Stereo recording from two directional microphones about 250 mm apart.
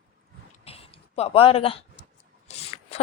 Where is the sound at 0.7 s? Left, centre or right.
Left.